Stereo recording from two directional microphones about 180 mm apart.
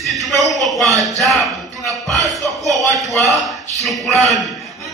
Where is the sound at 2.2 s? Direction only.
Centre (ahead or behind).